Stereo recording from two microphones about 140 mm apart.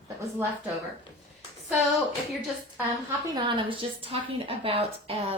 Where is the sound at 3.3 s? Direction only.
35° right (ahead or behind).